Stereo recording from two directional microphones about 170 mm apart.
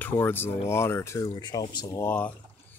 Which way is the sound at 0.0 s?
10° left (ahead or behind).